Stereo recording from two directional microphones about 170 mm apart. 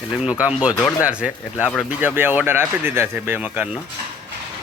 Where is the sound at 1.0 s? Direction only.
5° right (ahead or behind).